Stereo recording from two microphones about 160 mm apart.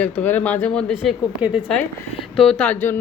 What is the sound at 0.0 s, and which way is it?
Speech, 10° left (ahead or behind).